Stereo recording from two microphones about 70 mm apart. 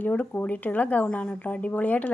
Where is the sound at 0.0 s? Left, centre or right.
Left.